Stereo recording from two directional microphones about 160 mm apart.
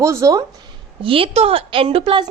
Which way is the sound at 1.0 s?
35° right (ahead or behind).